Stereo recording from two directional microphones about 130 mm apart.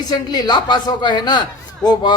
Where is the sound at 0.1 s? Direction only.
30° left (ahead or behind).